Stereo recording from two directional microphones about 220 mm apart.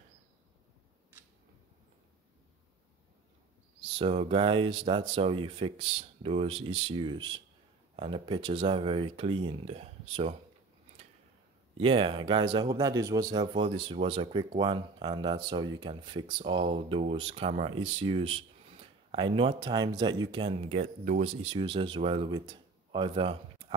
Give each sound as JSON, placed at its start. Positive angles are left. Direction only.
{"t": 3.9, "sound": "speech", "side_deg": -25}
{"t": 11.8, "sound": "speech", "side_deg": -25}